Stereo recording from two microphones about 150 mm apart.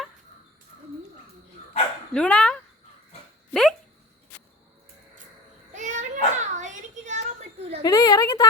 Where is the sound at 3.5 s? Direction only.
Centre (ahead or behind).